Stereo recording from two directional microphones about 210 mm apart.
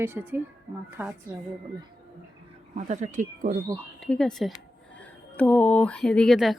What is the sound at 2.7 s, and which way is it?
Speech, 35° right (ahead or behind).